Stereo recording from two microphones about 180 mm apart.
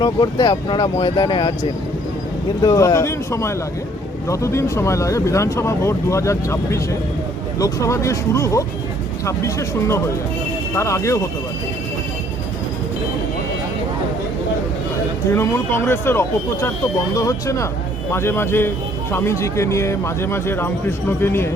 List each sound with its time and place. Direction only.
0.0 s speech: 25° left (ahead or behind)
2.6 s speech: 20° left (ahead or behind)
15.3 s speech: 15° left (ahead or behind)